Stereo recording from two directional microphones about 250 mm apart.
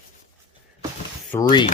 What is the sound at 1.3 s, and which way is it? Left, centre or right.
Speech, centre.